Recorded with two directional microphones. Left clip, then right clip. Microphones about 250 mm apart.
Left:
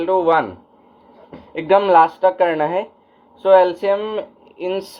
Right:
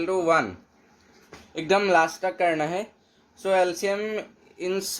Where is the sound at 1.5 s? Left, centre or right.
Right.